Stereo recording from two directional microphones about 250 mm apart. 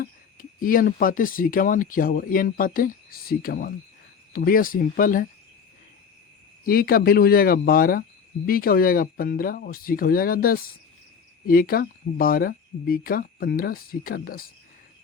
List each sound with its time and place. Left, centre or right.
0.0 s speech: left
6.7 s speech: left